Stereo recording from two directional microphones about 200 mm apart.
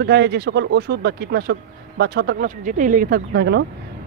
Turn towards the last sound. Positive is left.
turn(degrees=-55)  # may be behind; listen again after turning